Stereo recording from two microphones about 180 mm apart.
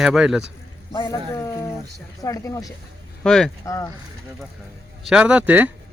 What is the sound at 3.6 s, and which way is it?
Speech, 15° left (ahead or behind).